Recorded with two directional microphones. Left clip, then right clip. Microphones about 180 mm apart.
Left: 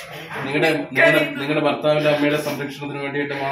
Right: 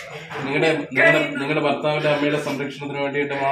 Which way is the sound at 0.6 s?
Centre (ahead or behind).